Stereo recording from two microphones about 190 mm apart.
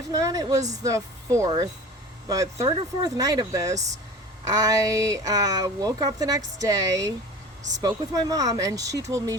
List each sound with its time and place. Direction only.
0.1 s speech: 20° right (ahead or behind)